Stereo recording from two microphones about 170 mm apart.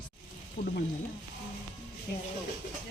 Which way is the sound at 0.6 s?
40° left (ahead or behind).